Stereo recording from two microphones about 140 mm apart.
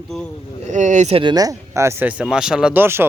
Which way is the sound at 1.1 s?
35° right (ahead or behind).